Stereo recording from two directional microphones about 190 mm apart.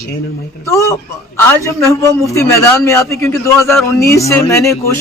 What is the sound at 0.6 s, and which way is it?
A man's voice, 15° left (ahead or behind).